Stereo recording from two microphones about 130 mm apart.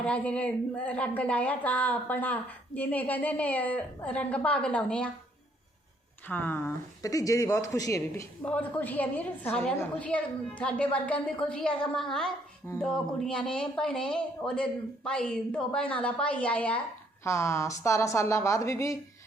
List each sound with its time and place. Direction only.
0.0 s speech: 10° left (ahead or behind)
6.2 s speech: 15° left (ahead or behind)
8.4 s speech: 10° left (ahead or behind)
17.2 s speech: 20° left (ahead or behind)